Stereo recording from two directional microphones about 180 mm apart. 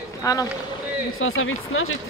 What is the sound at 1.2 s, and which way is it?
Speech, 90° left.